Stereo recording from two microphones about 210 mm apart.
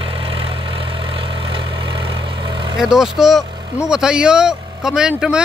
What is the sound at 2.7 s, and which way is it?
Speech, centre (ahead or behind).